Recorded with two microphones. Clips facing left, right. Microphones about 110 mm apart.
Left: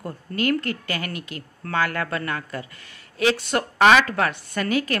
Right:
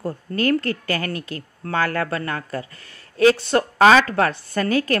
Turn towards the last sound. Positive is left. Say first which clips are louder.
# right 3 dB
turn(degrees=-35)  # may be behind; listen again after turning